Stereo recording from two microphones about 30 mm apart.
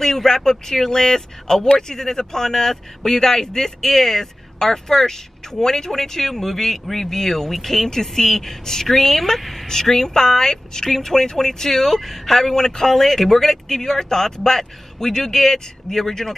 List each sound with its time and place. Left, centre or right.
0.0 s a woman's voice: centre
9.7 s speech: centre